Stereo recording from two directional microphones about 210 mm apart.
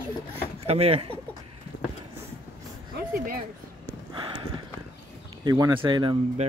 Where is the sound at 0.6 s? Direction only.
30° right (ahead or behind).